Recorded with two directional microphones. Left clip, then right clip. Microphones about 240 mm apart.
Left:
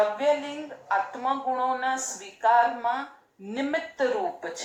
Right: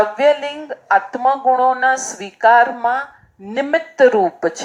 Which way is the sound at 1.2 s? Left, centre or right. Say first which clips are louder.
Right 13 dB; right.